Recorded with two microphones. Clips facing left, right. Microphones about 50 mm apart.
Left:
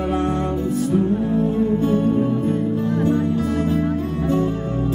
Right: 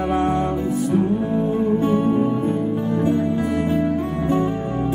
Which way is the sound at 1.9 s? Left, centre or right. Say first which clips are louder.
Even; right.